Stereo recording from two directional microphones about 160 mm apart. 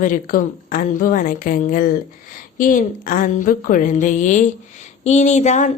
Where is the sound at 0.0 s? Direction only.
60° left (ahead or behind).